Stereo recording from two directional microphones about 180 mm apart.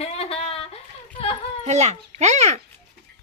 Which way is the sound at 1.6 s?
40° right (ahead or behind).